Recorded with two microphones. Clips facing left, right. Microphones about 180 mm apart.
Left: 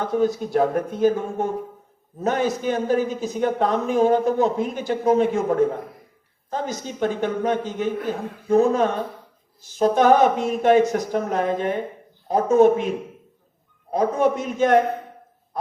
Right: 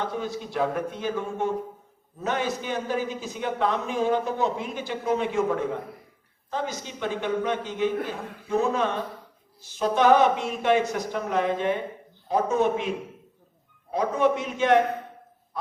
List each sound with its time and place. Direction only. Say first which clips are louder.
0.0 s a man's voice: left 9 dB; 45° left (ahead or behind)
13.9 s a man's voice: left 3 dB; 45° left (ahead or behind)